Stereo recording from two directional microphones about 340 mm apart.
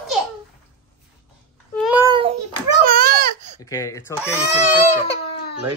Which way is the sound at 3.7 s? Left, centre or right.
Centre.